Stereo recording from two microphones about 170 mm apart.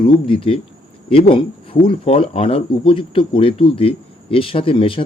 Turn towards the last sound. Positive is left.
turn(degrees=30)  # may be behind; listen again after turning